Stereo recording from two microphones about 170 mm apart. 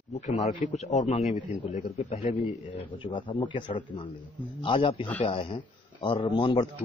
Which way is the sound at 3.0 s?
30° left (ahead or behind).